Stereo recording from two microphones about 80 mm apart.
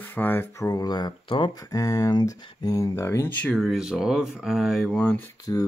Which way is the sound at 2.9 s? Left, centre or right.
Left.